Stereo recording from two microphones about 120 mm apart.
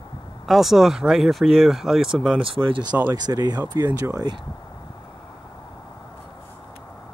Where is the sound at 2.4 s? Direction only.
50° right (ahead or behind).